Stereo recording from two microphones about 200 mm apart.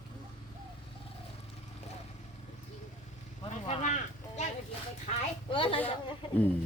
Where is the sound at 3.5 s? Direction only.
35° left (ahead or behind).